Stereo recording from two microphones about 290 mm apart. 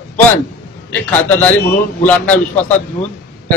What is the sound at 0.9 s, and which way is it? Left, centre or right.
A man's voice, centre.